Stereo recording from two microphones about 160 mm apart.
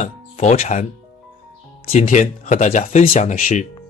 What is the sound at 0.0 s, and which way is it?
Speech, 45° left (ahead or behind).